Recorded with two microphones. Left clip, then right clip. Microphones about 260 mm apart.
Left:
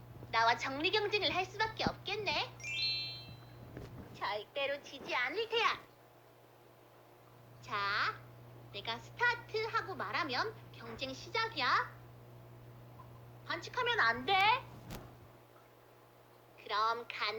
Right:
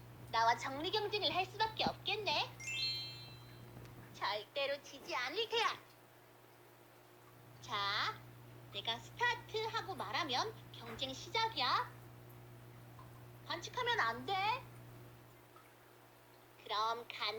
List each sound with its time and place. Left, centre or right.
0.3 s a woman's voice: centre
2.6 s wind chime: centre
4.1 s a woman's voice: centre
7.6 s a woman's voice: centre
11.1 s a woman's voice: left
11.5 s a woman's voice: centre
13.5 s a woman's voice: centre
16.6 s a woman's voice: centre